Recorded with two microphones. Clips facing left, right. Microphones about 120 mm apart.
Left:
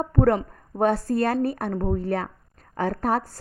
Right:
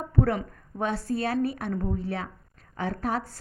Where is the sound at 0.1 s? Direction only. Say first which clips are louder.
Left 4 dB; 50° left (ahead or behind).